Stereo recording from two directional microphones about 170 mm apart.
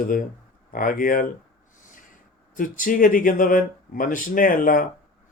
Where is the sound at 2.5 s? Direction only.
50° left (ahead or behind).